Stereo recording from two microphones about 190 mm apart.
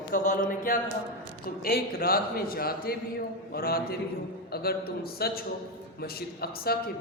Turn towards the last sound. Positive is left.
turn(degrees=55)  # may be behind; listen again after turning